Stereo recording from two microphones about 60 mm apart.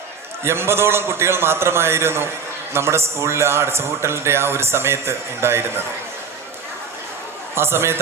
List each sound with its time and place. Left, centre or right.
0.4 s a man's voice: right
7.5 s a man's voice: right